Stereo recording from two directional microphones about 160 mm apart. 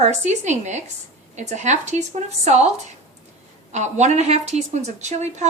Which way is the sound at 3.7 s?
45° right (ahead or behind).